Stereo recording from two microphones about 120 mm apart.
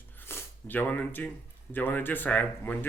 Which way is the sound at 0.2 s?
20° left (ahead or behind).